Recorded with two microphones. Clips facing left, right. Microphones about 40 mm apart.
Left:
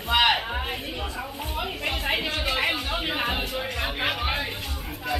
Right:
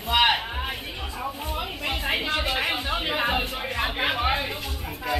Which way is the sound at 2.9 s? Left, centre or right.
Centre.